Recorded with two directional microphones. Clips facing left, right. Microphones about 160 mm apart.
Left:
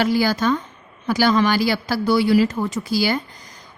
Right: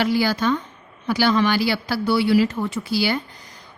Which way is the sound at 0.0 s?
45° left (ahead or behind).